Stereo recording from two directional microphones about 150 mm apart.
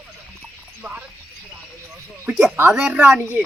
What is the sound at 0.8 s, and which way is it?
Speech, 15° right (ahead or behind).